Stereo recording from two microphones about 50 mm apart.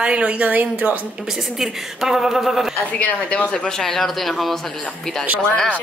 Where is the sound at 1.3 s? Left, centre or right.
Centre.